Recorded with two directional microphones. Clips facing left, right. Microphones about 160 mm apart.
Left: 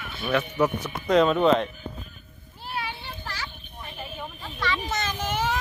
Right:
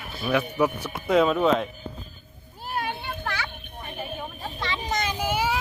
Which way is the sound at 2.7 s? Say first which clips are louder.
Right 4 dB; 50° right (ahead or behind).